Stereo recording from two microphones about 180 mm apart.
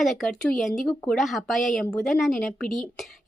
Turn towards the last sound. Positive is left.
turn(degrees=0)  # may be behind; listen again after turning